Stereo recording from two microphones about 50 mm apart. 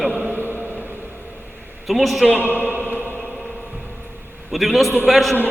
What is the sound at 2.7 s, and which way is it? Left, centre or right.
Chant, right.